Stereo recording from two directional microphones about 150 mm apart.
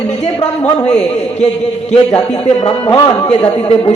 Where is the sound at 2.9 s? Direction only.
25° left (ahead or behind).